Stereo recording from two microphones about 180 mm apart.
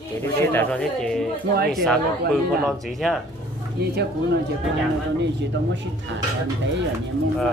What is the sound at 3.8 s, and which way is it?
Speech, 65° right (ahead or behind).